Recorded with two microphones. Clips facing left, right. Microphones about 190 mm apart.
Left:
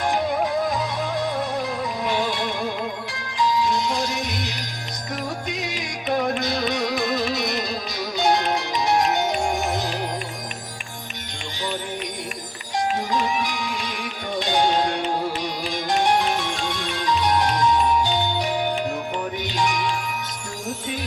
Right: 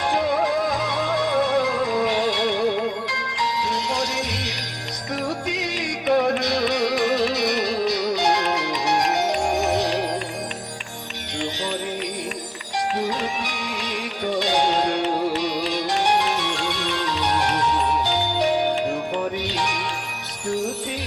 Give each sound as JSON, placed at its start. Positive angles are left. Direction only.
{"t": 0.7, "sound": "music", "side_deg": -80}
{"t": 13.4, "sound": "music", "side_deg": -70}